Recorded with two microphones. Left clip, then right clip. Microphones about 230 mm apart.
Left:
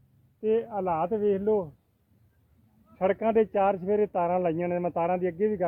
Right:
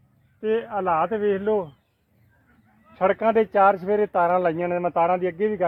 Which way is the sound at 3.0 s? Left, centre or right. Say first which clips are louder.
Right 4 dB; right.